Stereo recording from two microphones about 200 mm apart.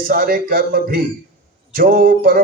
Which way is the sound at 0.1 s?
50° right (ahead or behind).